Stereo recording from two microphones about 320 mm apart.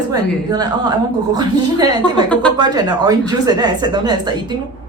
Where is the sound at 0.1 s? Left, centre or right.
Centre.